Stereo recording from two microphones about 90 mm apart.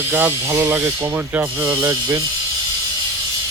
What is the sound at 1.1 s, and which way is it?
Speech, 20° right (ahead or behind).